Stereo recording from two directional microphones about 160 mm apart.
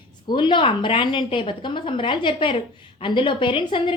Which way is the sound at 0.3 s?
30° left (ahead or behind).